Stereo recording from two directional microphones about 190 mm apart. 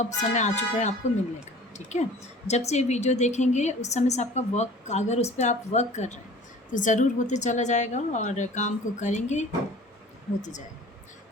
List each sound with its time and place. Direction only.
0.0 s a woman's voice: 40° left (ahead or behind)